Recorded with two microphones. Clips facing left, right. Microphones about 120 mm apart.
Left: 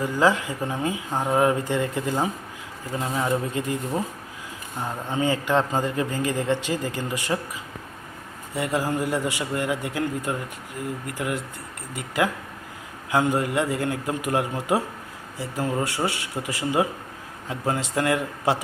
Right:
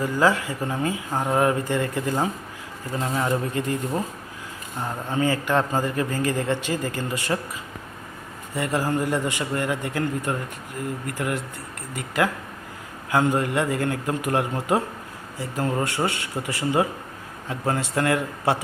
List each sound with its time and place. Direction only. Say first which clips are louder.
0.0 s a man's voice: even; 15° left (ahead or behind)
8.5 s a man's voice: right 1 dB; 15° left (ahead or behind)